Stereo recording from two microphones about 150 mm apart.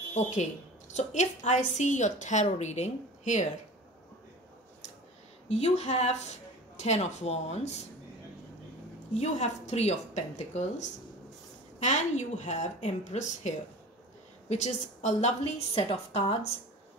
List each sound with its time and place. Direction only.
0.1 s a woman's voice: 50° left (ahead or behind)
5.5 s a woman's voice: 45° left (ahead or behind)
9.1 s a woman's voice: 45° left (ahead or behind)